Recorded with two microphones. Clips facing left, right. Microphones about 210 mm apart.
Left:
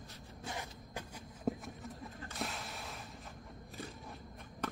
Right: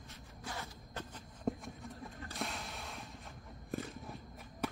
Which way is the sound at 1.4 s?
Centre (ahead or behind).